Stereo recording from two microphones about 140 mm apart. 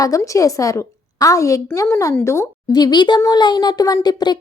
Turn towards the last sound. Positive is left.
turn(degrees=30)  # may be behind; listen again after turning